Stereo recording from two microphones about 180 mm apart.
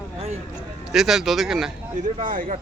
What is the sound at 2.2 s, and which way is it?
Speech, 50° right (ahead or behind).